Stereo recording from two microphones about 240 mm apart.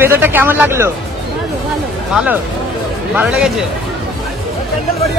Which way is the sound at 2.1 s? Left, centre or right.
Centre.